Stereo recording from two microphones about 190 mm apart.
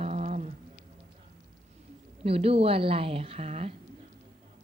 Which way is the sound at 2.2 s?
30° right (ahead or behind).